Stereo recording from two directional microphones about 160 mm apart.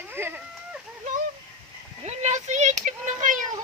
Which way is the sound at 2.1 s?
45° right (ahead or behind).